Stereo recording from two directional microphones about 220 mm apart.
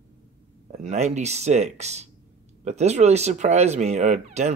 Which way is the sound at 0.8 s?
30° right (ahead or behind).